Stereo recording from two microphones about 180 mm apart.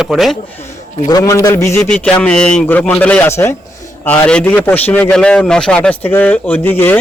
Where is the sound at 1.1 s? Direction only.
20° left (ahead or behind).